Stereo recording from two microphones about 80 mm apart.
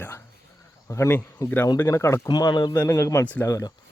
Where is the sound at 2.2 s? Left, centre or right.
Left.